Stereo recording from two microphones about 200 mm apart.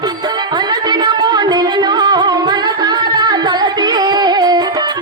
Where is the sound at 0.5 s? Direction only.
20° right (ahead or behind).